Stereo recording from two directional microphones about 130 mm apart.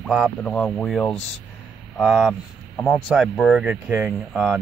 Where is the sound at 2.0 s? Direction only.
5° right (ahead or behind).